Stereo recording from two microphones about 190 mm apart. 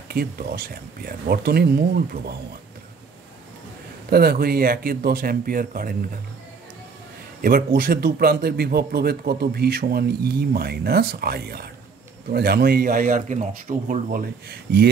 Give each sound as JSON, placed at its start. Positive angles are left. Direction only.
{"t": 0.1, "sound": "a man's voice", "side_deg": -55}
{"t": 4.1, "sound": "a man's voice", "side_deg": -55}
{"t": 7.4, "sound": "a man's voice", "side_deg": -50}